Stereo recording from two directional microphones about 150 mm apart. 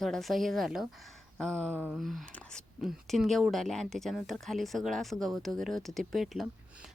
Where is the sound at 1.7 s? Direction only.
10° right (ahead or behind).